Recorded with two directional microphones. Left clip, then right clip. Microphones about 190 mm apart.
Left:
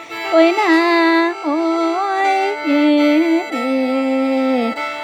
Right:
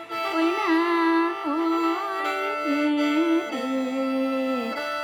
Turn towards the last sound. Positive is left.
turn(degrees=45)  # may be behind; listen again after turning